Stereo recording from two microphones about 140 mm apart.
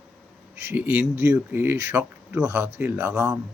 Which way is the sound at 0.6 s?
15° right (ahead or behind).